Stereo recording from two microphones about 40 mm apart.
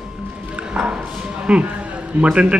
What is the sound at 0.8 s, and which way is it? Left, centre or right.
A man's voice, right.